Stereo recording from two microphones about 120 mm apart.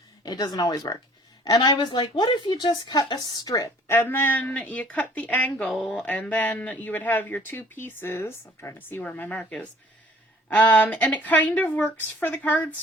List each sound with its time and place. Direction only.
0.2 s a woman's voice: 35° left (ahead or behind); by 12.6 s 15° left (ahead or behind)